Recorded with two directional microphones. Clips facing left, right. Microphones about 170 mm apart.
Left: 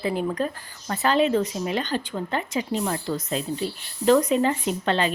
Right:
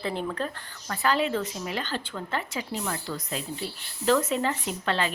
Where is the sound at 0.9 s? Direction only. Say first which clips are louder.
Left 5 dB; 25° left (ahead or behind).